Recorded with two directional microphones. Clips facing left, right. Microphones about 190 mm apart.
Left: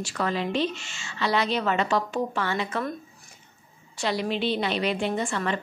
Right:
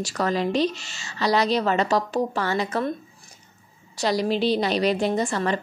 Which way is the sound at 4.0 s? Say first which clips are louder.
Right 4 dB; 40° right (ahead or behind).